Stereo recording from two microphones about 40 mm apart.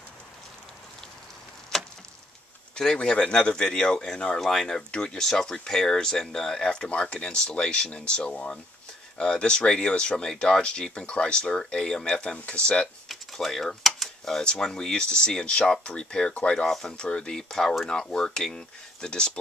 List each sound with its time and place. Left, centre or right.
2.7 s speech: left
4.4 s speech: centre
6.9 s speech: left
13.1 s a sound: centre
14.6 s speech: centre
16.6 s speech: centre
16.9 s speech: left